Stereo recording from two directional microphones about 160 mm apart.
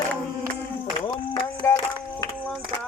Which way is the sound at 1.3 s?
25° left (ahead or behind).